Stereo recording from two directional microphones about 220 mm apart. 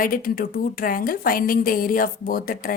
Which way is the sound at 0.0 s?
40° left (ahead or behind).